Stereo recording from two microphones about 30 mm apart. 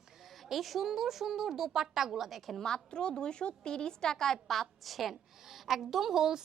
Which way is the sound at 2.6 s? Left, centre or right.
Left.